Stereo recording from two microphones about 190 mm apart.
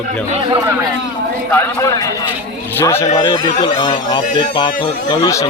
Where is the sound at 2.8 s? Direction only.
15° left (ahead or behind).